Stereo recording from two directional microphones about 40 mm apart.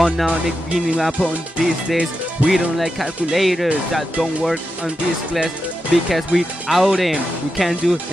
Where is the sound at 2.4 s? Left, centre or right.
Centre.